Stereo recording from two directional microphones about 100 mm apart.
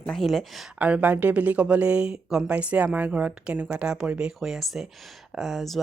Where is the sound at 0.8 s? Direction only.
15° right (ahead or behind).